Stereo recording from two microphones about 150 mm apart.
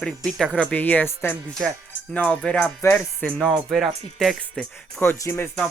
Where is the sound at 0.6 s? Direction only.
10° left (ahead or behind).